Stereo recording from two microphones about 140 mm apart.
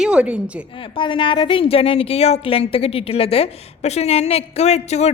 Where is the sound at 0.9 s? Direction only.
35° left (ahead or behind).